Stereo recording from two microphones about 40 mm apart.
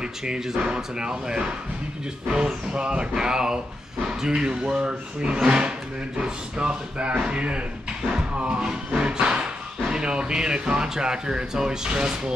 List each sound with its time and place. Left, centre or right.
0.0 s speech: centre